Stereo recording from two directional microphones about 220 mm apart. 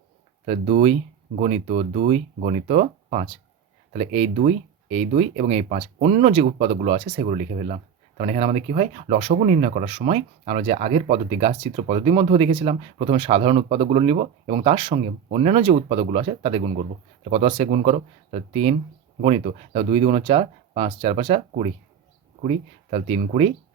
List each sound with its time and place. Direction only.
0.4 s speech: 30° right (ahead or behind)